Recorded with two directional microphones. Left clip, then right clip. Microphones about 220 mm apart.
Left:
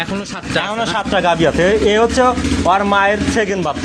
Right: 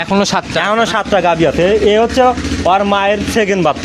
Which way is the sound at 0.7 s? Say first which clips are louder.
Right 6 dB; 35° right (ahead or behind).